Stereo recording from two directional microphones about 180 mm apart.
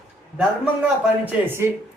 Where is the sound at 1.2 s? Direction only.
15° right (ahead or behind).